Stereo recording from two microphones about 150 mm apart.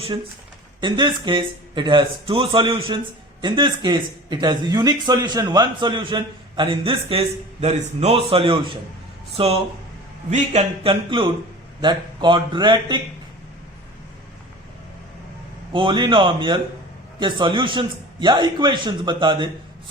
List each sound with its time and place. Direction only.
0.8 s a man's voice: 30° right (ahead or behind); by 10.6 s 50° right (ahead or behind)
10.8 s a man's voice: 35° right (ahead or behind)
15.7 s a man's voice: 35° right (ahead or behind)